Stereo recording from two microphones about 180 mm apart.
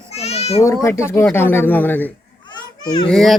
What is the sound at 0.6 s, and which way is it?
Speech, 15° left (ahead or behind).